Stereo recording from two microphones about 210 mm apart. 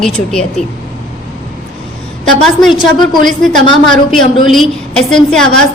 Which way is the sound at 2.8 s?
20° left (ahead or behind).